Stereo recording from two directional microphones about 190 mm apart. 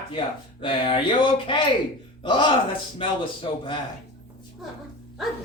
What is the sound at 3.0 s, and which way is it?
Speech, 25° left (ahead or behind).